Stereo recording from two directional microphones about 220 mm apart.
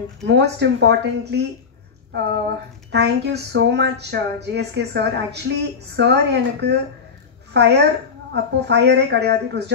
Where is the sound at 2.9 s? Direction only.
50° right (ahead or behind).